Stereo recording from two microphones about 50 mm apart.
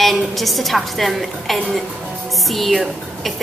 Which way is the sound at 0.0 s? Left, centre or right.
Centre.